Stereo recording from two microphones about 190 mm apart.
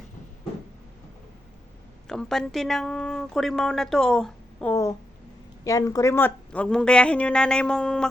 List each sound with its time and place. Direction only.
2.0 s speech: 5° left (ahead or behind)
4.7 s speech: 15° left (ahead or behind)